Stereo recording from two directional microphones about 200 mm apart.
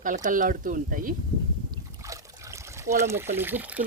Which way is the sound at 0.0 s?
40° right (ahead or behind).